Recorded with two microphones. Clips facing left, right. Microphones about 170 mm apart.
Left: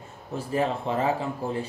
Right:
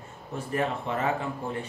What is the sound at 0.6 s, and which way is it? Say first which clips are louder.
Speech: left 3 dB; 30° left (ahead or behind).